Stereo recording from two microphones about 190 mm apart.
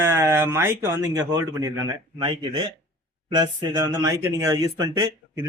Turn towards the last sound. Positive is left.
turn(degrees=-15)  # may be behind; listen again after turning